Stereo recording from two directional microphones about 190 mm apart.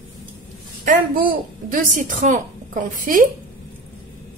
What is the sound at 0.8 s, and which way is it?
A woman's voice, 45° right (ahead or behind).